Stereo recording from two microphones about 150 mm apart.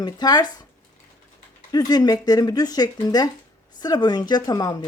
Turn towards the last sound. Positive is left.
turn(degrees=25)  # may be behind; listen again after turning